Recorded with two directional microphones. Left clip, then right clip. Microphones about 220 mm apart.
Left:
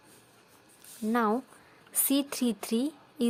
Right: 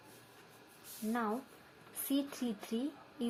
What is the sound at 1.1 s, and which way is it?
A woman's voice, 50° left (ahead or behind).